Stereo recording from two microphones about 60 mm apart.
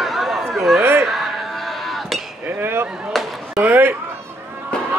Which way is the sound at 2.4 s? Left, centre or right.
Right.